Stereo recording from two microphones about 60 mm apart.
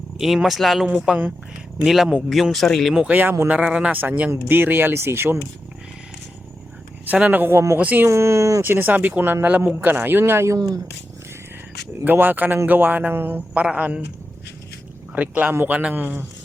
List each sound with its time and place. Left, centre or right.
0.4 s speech: centre
3.1 s speech: right
3.6 s speech: centre
3.9 s speech: right
7.1 s speech: right
8.0 s speech: right
8.6 s speech: right
12.0 s speech: right
13.5 s speech: right
15.1 s speech: right